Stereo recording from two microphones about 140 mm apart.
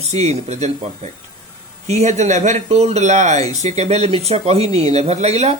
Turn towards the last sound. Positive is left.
turn(degrees=-50)  # may be behind; listen again after turning